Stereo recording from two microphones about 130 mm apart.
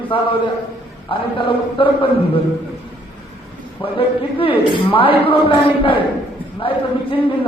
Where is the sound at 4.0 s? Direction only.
45° left (ahead or behind).